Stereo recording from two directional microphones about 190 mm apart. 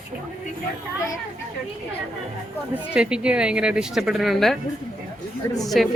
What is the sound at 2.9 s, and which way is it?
Speech, 5° right (ahead or behind).